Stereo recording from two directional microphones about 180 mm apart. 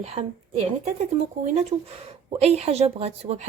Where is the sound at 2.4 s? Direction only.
35° right (ahead or behind).